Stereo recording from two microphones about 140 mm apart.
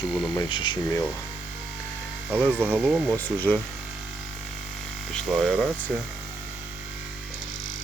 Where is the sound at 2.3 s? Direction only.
5° left (ahead or behind).